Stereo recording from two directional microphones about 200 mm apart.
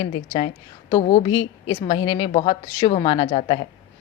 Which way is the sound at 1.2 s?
20° left (ahead or behind).